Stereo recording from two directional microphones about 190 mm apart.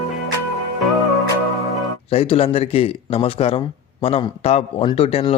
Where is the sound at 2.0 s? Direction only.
30° left (ahead or behind).